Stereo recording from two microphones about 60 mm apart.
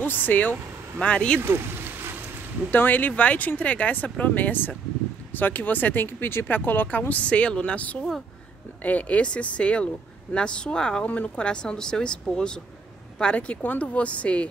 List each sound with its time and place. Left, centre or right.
0.0 s speech: left
0.9 s speech: centre
1.4 s a sound: right
2.7 s speech: left